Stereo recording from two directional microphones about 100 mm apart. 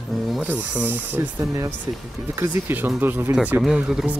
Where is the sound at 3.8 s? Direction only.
10° right (ahead or behind).